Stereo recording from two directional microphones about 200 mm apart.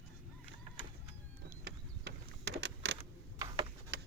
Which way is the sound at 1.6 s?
55° right (ahead or behind).